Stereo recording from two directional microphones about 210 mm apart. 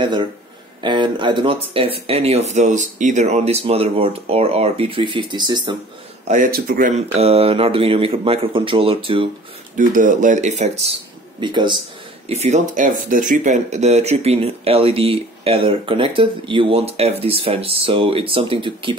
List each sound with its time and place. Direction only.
0.0 s speech: 20° right (ahead or behind)
6.2 s speech: 40° right (ahead or behind)
9.8 s speech: 40° right (ahead or behind); by 11.8 s 20° right (ahead or behind)
12.3 s speech: 30° right (ahead or behind)